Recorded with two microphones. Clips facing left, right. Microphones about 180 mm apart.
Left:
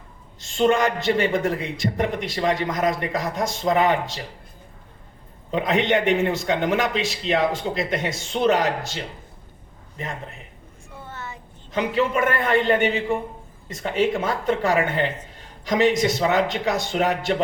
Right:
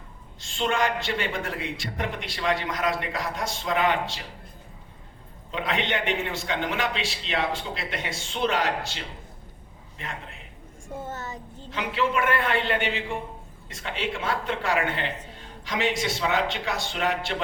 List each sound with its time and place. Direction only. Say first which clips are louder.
0.4 s a man's voice: left 6 dB; 45° left (ahead or behind)
5.5 s a man's voice: left 7 dB; 45° left (ahead or behind)
10.8 s a sound: right 3 dB; 45° right (ahead or behind)
11.7 s a man's voice: left 5 dB; 45° left (ahead or behind)